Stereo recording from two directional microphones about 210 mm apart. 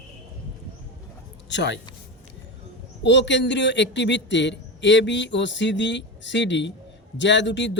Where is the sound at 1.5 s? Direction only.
60° left (ahead or behind).